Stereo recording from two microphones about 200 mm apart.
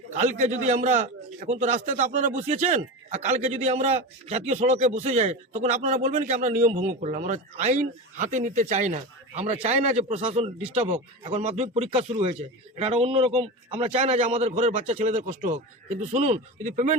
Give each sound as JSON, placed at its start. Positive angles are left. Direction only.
{"t": 0.1, "sound": "a man's voice", "side_deg": -35}